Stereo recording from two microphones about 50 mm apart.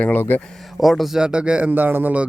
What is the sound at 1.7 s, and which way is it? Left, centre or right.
Speech, right.